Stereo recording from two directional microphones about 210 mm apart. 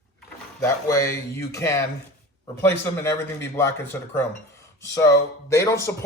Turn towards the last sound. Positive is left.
turn(degrees=15)  # may be behind; listen again after turning